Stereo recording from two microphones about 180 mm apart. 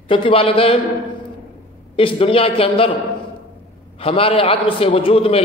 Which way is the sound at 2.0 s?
30° left (ahead or behind).